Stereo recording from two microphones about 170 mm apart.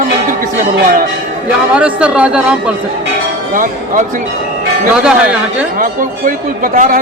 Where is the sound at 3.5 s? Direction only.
50° right (ahead or behind).